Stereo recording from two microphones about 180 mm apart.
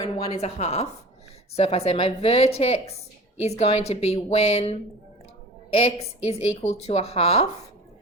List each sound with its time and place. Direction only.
0.4 s a woman's voice: 35° left (ahead or behind)